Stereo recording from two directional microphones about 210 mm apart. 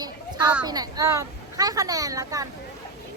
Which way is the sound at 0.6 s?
20° right (ahead or behind).